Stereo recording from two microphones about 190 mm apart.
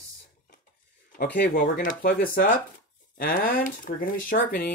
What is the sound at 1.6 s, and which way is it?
Speech, 50° left (ahead or behind).